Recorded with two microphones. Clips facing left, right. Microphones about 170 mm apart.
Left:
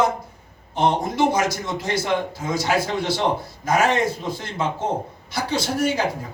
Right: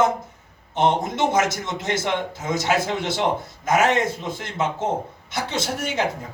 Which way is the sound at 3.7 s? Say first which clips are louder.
Even; 25° right (ahead or behind).